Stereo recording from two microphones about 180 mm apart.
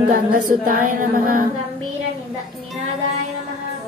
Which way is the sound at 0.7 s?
50° right (ahead or behind).